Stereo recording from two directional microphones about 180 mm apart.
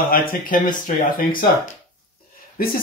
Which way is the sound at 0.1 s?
50° left (ahead or behind).